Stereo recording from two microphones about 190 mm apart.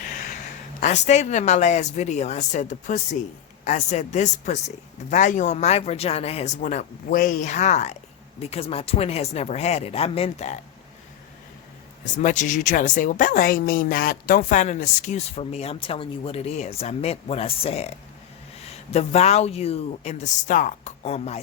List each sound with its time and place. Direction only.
0.0 s a sound: 45° left (ahead or behind)
0.8 s speech: 40° left (ahead or behind)
12.0 s speech: 40° left (ahead or behind)